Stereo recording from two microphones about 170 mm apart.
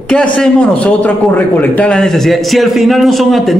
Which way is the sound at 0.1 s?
5° left (ahead or behind).